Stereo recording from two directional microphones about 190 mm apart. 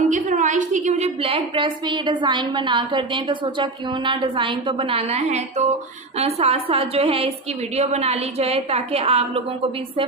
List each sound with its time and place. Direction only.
0.1 s a woman's voice: 40° right (ahead or behind)